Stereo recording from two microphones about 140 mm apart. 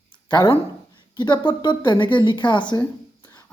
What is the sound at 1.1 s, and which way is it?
Speech, 30° left (ahead or behind).